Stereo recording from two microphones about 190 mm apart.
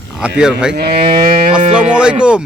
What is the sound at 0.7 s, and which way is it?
Speech, 55° right (ahead or behind).